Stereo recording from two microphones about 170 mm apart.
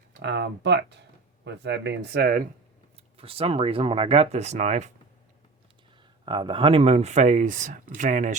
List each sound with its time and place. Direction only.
0.2 s speech: 90° right; by 2.4 s 65° right (ahead or behind)
3.2 s speech: 35° right (ahead or behind)
6.2 s speech: 30° right (ahead or behind); by 8.4 s 50° right (ahead or behind)